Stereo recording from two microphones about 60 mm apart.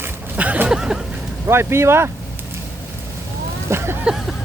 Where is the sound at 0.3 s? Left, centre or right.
Right.